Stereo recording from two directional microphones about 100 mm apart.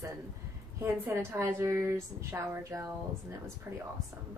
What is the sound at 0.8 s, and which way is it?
A woman's voice, 25° right (ahead or behind).